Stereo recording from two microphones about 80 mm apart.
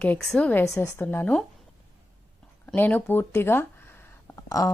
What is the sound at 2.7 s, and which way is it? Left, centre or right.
Speech, left.